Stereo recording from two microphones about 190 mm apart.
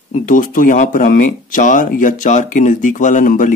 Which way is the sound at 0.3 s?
45° left (ahead or behind).